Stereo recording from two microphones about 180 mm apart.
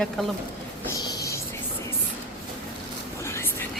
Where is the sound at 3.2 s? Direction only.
15° left (ahead or behind).